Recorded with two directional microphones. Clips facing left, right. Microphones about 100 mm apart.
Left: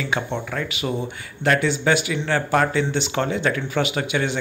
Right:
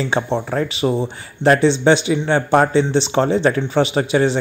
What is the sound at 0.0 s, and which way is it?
Speech, 30° right (ahead or behind).